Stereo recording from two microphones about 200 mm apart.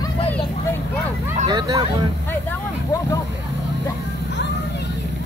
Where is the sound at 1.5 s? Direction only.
20° right (ahead or behind).